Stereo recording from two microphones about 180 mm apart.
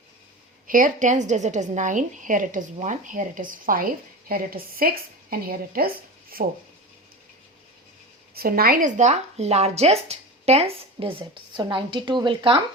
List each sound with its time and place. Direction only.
0.7 s a woman's voice: 45° right (ahead or behind)
8.4 s speech: 55° right (ahead or behind); by 12.5 s 25° right (ahead or behind)